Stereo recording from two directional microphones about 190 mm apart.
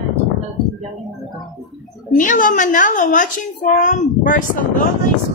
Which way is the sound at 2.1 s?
45° left (ahead or behind).